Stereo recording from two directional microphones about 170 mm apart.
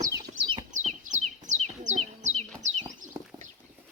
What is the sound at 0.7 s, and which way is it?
Bird, 45° right (ahead or behind).